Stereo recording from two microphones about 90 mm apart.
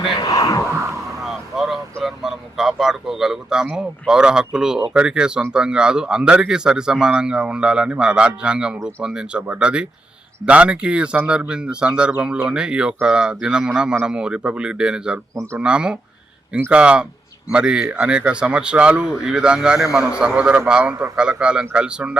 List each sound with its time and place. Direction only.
0.2 s a sound: 45° left (ahead or behind)
1.2 s vehicle: 5° right (ahead or behind)
2.0 s a man's voice: 5° right (ahead or behind)